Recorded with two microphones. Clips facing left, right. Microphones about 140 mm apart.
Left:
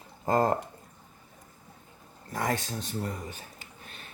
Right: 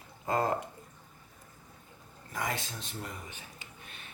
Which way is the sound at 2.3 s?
45° left (ahead or behind).